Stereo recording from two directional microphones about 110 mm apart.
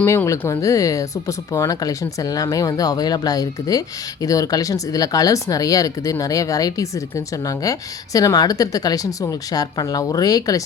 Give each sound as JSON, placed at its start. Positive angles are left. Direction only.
{"t": 0.0, "sound": "speech", "side_deg": 25}